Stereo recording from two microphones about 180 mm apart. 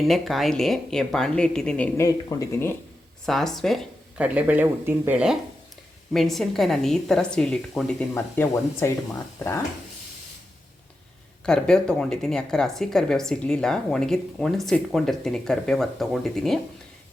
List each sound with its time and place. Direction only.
0.1 s a woman's voice: centre (ahead or behind); by 2.7 s 15° left (ahead or behind)
3.2 s speech: centre (ahead or behind)
11.4 s speech: 5° left (ahead or behind)